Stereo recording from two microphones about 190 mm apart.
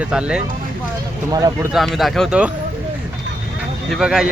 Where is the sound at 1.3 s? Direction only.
20° right (ahead or behind).